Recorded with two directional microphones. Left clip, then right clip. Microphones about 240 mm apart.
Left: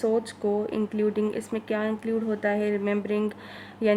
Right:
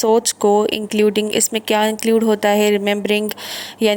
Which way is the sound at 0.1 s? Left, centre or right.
Right.